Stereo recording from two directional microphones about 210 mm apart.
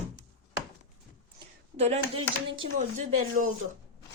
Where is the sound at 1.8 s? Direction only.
30° right (ahead or behind).